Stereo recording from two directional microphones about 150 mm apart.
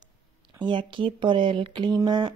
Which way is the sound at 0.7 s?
30° right (ahead or behind).